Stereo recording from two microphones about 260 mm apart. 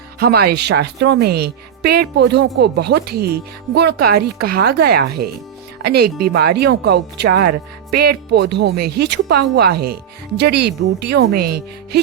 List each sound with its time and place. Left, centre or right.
0.2 s speech: right